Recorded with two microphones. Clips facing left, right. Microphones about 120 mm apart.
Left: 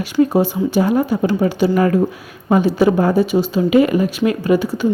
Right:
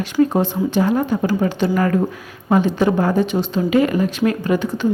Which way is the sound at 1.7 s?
25° left (ahead or behind).